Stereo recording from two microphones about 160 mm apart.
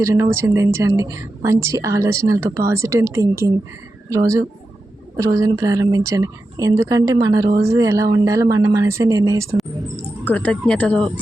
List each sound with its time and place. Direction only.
0.0 s a woman's voice: 20° right (ahead or behind)
10.2 s speech: 10° left (ahead or behind)